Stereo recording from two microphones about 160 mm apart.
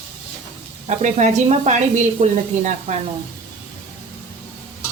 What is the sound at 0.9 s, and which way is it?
A woman's voice, 45° right (ahead or behind).